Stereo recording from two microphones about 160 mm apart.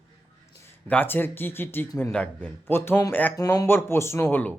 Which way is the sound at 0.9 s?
10° left (ahead or behind).